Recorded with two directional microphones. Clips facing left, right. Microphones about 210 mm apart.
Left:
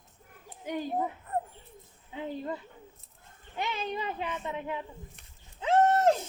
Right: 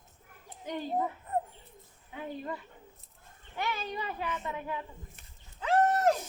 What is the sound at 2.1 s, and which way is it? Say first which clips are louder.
A child's voice: left 3 dB; 25° left (ahead or behind).